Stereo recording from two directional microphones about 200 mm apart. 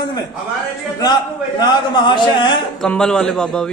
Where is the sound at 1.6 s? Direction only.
20° left (ahead or behind).